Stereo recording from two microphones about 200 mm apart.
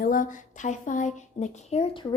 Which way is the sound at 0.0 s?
40° left (ahead or behind).